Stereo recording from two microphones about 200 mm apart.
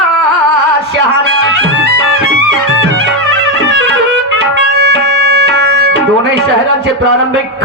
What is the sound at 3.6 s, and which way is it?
Music, 55° right (ahead or behind).